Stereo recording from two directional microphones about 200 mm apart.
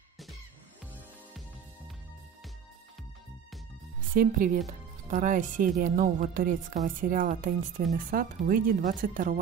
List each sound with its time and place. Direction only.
4.1 s speech: 45° right (ahead or behind)